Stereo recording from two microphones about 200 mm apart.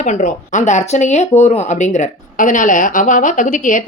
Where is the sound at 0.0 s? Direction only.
40° left (ahead or behind).